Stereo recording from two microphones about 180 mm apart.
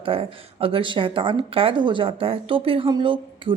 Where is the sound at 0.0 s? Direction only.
30° right (ahead or behind).